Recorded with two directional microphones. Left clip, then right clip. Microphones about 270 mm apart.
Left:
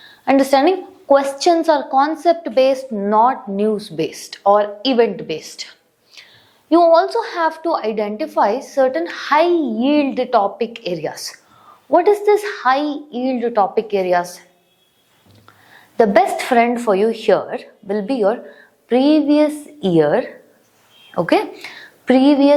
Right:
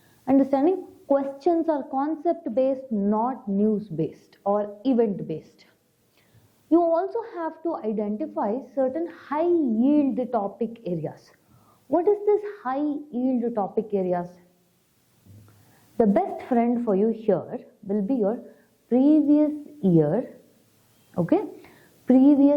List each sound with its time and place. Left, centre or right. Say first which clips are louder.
0.3 s a woman's voice: left 8 dB; centre
3.8 s a woman's voice: left 7 dB; centre
6.9 s a woman's voice: left 11 dB; centre
9.6 s a woman's voice: left 4 dB; left
9.8 s a woman's voice: left 6 dB; centre
16.0 s a woman's voice: left 9 dB; centre